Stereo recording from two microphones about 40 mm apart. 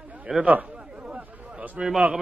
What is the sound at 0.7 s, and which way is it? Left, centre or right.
Chatter, right.